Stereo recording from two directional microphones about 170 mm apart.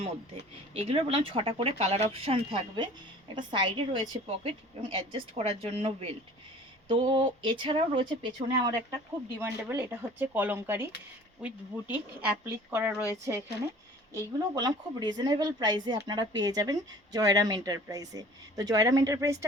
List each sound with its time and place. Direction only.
0.7 s speech: 35° right (ahead or behind)
9.4 s a woman's voice: 10° right (ahead or behind)